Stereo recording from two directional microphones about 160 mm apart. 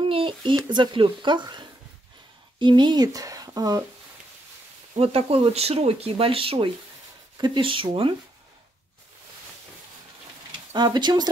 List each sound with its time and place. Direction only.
0.0 s speech: 35° right (ahead or behind)
4.9 s speech: 40° right (ahead or behind)
10.7 s speech: 25° right (ahead or behind)